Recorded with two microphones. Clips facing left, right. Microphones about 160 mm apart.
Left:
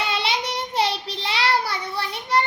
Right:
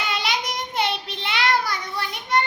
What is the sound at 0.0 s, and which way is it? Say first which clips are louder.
Child singing: left 2 dB; 30° left (ahead or behind).